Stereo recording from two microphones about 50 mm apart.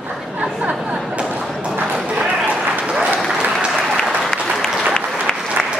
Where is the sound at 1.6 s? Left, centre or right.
Centre.